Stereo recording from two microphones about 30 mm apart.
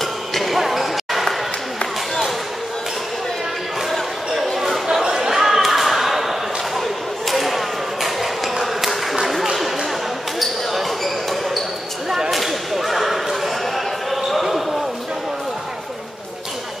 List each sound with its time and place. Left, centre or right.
0.0 s basketball bounce: centre
5.0 s a sound: centre
5.4 s a sound: centre
10.4 s basketball bounce: centre
12.3 s whip: centre
14.1 s basketball bounce: centre